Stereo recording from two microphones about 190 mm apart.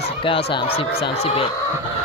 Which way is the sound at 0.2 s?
30° left (ahead or behind).